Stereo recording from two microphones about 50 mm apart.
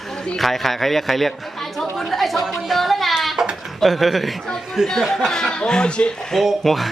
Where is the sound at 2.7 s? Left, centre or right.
Centre.